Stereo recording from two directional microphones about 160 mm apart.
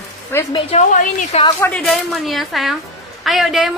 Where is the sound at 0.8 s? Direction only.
50° left (ahead or behind).